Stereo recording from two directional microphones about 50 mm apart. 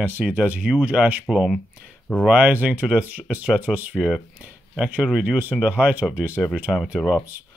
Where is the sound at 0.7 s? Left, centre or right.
Right.